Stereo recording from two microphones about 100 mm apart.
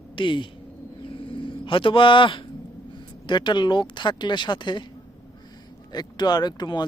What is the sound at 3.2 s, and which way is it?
Speech, 50° left (ahead or behind).